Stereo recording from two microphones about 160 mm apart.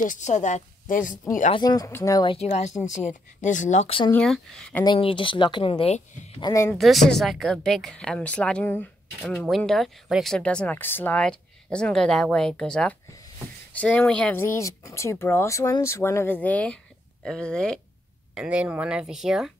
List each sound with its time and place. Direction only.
0.0 s a woman's voice: 50° left (ahead or behind)
1.5 s speech: 25° left (ahead or behind)
2.2 s a woman's voice: 40° left (ahead or behind)
4.1 s speech: 5° left (ahead or behind)
4.8 s speech: 30° left (ahead or behind)
6.4 s speech: 20° left (ahead or behind)
6.7 s speech: centre (ahead or behind)
18.3 s speech: 5° right (ahead or behind)